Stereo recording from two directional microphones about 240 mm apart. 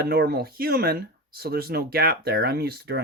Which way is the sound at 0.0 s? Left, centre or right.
Right.